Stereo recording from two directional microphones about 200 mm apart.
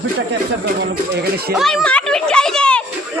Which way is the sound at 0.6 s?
60° right (ahead or behind).